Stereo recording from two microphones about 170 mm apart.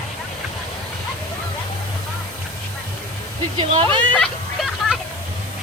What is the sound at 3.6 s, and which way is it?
Speech, 30° right (ahead or behind).